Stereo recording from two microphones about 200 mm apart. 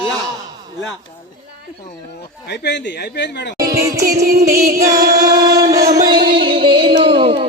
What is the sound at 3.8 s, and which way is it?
Music, 15° right (ahead or behind).